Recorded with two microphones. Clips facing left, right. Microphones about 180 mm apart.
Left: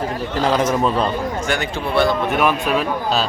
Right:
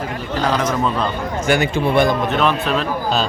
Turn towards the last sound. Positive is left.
turn(degrees=10)  # may be behind; listen again after turning